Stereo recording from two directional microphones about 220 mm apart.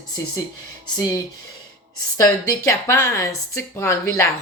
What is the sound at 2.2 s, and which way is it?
Speech, 15° left (ahead or behind).